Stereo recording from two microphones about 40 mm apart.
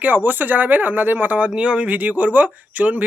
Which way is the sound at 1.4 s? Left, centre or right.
Right.